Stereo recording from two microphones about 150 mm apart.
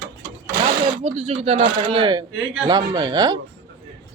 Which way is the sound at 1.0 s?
45° right (ahead or behind).